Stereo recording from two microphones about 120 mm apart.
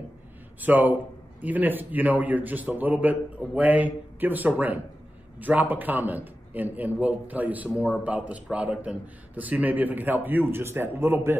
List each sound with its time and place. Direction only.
0.6 s a man's voice: 15° right (ahead or behind)